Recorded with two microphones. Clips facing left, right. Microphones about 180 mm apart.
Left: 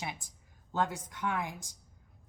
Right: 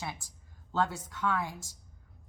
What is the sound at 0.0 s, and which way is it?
Speech, 20° left (ahead or behind).